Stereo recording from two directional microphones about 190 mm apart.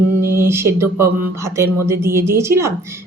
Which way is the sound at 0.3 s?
15° right (ahead or behind).